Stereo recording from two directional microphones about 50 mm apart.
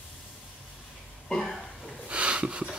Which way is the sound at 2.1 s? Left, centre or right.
Right.